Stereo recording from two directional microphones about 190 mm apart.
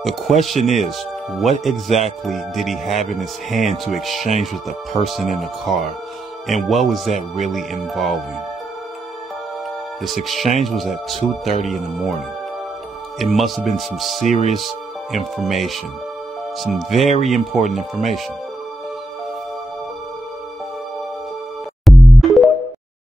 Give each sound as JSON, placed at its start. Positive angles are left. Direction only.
{"t": 0.0, "sound": "speech", "side_deg": 0}
{"t": 2.9, "sound": "speech", "side_deg": 40}
{"t": 3.2, "sound": "speech", "side_deg": 0}
{"t": 10.0, "sound": "speech", "side_deg": 0}
{"t": 13.2, "sound": "speech", "side_deg": 0}
{"t": 21.8, "sound": "music", "side_deg": 0}